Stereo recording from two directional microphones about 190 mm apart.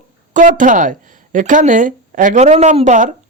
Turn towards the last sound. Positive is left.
turn(degrees=-40)  # may be behind; listen again after turning